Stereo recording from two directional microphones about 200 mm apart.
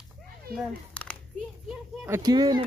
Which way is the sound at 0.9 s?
5° left (ahead or behind).